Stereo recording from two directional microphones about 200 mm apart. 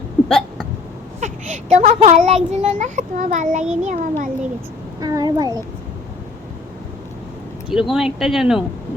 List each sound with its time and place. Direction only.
0.3 s hiccup: centre (ahead or behind)
1.2 s a child's voice: 35° right (ahead or behind)
4.9 s a child's voice: 20° right (ahead or behind)
7.7 s speech: centre (ahead or behind)